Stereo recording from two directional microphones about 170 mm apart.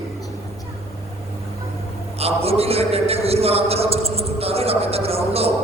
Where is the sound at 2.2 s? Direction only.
35° right (ahead or behind).